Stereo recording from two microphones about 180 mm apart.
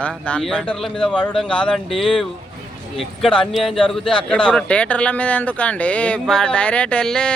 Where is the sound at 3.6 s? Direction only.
30° left (ahead or behind).